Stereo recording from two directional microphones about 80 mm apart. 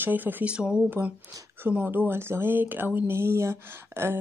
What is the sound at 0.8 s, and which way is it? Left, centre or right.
Speech, right.